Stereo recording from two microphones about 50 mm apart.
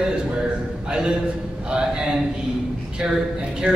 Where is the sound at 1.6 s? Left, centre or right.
Centre.